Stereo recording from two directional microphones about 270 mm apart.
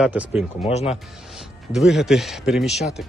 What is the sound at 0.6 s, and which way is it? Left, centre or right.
Speech, left.